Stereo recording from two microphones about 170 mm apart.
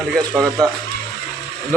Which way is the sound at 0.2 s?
Centre (ahead or behind).